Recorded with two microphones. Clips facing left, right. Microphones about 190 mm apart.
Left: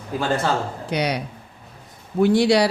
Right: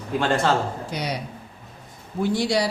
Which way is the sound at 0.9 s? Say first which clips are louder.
Left 5 dB; 70° left (ahead or behind).